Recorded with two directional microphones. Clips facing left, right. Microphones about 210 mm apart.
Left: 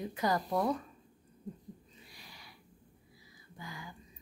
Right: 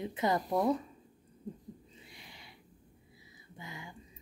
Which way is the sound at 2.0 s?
25° right (ahead or behind).